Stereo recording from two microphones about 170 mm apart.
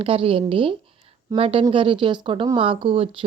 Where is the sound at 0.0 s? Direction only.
35° right (ahead or behind).